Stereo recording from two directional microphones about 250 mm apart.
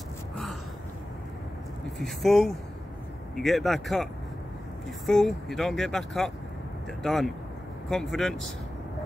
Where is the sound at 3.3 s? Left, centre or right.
Centre.